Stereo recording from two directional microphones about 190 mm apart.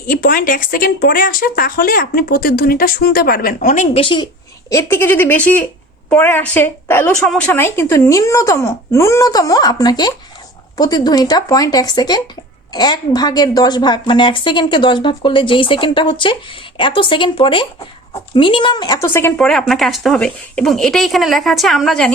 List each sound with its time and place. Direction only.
0.1 s speech: 50° left (ahead or behind); by 4.3 s 25° left (ahead or behind)
4.7 s a woman's voice: 15° left (ahead or behind)
19.0 s speech: 10° left (ahead or behind)